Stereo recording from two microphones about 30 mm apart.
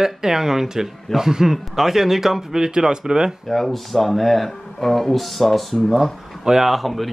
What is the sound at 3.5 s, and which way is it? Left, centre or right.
Speech, centre.